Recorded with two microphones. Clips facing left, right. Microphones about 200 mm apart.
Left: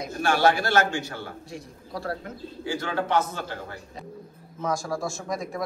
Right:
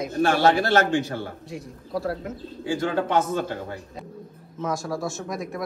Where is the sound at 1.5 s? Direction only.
Centre (ahead or behind).